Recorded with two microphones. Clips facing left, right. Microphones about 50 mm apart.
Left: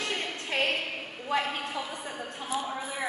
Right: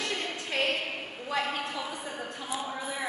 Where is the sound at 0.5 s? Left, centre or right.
Left.